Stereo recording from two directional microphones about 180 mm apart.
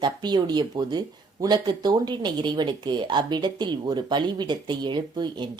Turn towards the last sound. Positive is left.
turn(degrees=-25)  # may be behind; listen again after turning